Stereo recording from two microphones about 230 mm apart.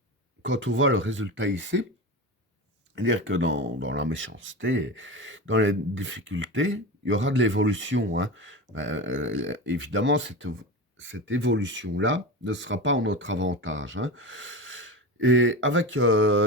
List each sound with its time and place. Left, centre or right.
0.4 s speech: right
2.9 s speech: right